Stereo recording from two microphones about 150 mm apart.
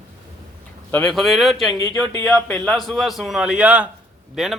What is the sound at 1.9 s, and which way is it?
Speech, 15° left (ahead or behind).